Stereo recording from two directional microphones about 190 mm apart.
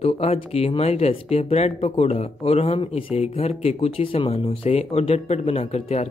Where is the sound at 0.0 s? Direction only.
30° left (ahead or behind).